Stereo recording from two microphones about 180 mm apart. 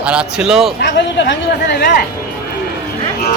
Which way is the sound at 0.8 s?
75° left (ahead or behind).